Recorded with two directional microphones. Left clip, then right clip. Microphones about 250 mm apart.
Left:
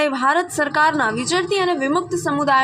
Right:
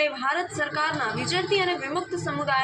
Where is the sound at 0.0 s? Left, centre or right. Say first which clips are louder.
Left 7 dB; left.